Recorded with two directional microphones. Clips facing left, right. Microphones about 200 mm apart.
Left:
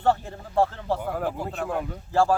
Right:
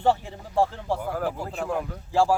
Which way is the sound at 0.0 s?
10° right (ahead or behind).